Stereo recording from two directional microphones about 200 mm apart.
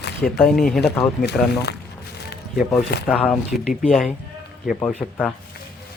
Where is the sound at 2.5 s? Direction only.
5° right (ahead or behind).